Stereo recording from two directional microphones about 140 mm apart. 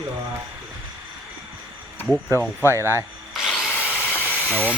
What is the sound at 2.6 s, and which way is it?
Speech, 20° right (ahead or behind).